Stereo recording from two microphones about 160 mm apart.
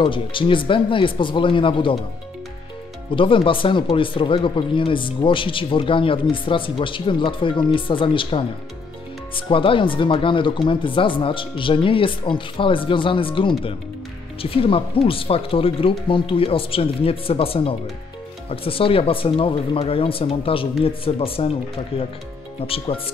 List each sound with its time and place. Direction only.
0.0 s speech: 30° left (ahead or behind)
3.2 s speech: 30° left (ahead or behind)